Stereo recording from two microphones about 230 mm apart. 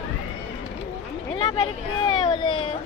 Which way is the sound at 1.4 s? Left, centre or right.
Centre.